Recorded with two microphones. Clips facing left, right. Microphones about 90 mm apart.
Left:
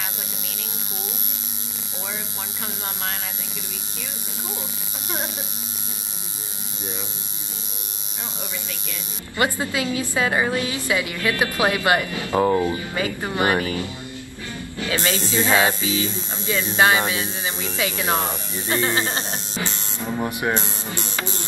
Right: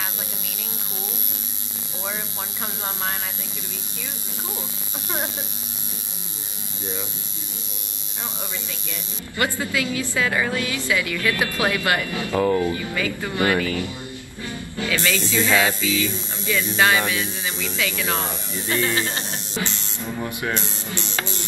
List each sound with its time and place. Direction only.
9.4 s speech: 25° left (ahead or behind)
14.9 s speech: 25° left (ahead or behind)